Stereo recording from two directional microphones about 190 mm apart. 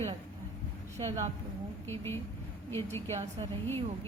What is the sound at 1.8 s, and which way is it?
Speech, 15° left (ahead or behind).